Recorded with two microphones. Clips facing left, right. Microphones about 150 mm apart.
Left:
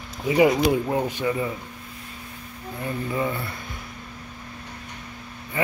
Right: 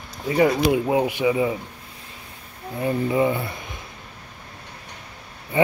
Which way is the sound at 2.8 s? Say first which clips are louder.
Right 6 dB; 20° right (ahead or behind).